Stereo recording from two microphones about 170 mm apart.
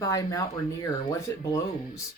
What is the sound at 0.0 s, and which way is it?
Speech, 20° left (ahead or behind).